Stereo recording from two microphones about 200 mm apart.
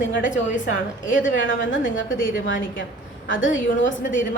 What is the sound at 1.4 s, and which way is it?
Speech, 70° left (ahead or behind).